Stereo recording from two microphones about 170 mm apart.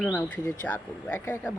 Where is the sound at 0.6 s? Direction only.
10° left (ahead or behind).